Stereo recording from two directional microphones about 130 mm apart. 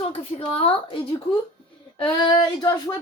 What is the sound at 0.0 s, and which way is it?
A woman's voice, 45° left (ahead or behind).